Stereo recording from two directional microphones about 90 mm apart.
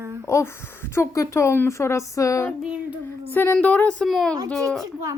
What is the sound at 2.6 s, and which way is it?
Speech, 10° right (ahead or behind).